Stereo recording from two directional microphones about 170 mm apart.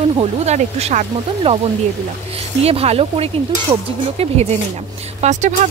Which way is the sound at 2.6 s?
35° right (ahead or behind).